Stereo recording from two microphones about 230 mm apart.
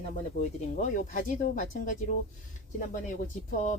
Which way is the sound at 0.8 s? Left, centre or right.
Left.